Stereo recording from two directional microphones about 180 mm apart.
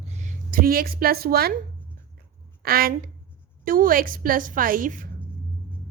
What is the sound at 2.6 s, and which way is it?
A woman's voice, 60° right (ahead or behind).